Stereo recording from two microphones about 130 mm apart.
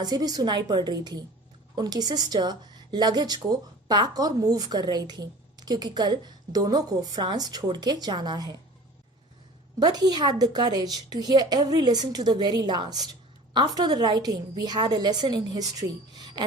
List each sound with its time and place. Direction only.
0.0 s a woman's voice: 30° right (ahead or behind)
9.8 s a woman's voice: 30° right (ahead or behind)